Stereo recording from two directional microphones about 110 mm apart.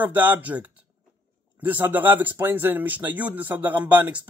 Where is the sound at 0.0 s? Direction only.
15° right (ahead or behind).